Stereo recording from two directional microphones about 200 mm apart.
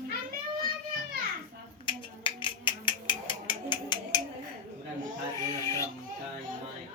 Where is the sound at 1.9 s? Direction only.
25° left (ahead or behind).